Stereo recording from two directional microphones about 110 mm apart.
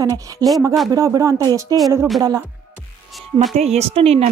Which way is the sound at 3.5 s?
75° right (ahead or behind).